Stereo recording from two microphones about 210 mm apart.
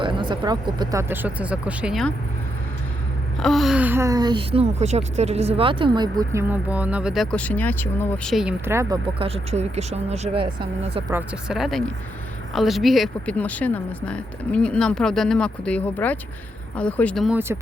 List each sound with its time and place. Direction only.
0.0 s speech: 20° right (ahead or behind); by 2.1 s centre (ahead or behind)
3.4 s speech: centre (ahead or behind)
9.1 s speech: 25° right (ahead or behind)
11.1 s speech: 5° right (ahead or behind)